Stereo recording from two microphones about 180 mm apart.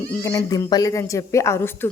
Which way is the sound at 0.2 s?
20° left (ahead or behind).